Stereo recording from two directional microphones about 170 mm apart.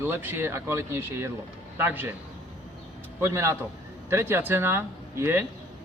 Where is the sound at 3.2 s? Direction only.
15° right (ahead or behind).